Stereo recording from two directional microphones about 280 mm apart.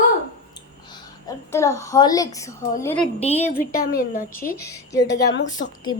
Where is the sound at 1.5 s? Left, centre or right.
Centre.